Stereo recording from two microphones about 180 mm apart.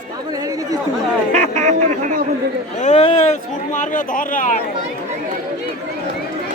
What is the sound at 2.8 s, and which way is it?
Speech, 35° left (ahead or behind).